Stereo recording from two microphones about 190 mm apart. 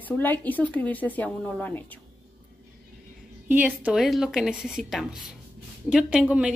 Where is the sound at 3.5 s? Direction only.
10° right (ahead or behind).